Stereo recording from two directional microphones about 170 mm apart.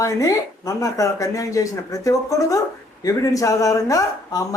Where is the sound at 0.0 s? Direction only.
20° left (ahead or behind).